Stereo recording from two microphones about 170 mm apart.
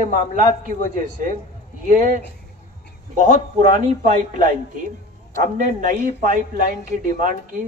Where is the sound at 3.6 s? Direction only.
50° right (ahead or behind).